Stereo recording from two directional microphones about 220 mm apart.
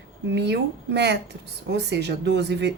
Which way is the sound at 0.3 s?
50° right (ahead or behind).